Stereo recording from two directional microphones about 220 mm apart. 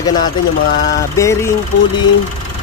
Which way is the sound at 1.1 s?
15° left (ahead or behind).